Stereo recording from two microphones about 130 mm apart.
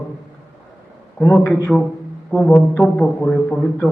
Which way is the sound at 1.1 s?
5° left (ahead or behind).